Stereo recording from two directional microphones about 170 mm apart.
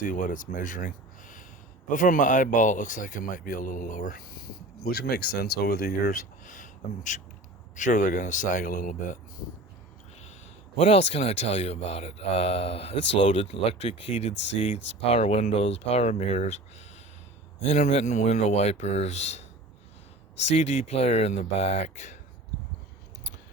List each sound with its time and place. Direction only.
0.0 s speech: 50° left (ahead or behind)
4.9 s speech: 70° left (ahead or behind)
6.4 s speech: 50° left (ahead or behind)
10.8 s speech: 40° left (ahead or behind)
12.9 s speech: 90° left
13.1 s speech: 30° left (ahead or behind)
17.6 s speech: 40° left (ahead or behind)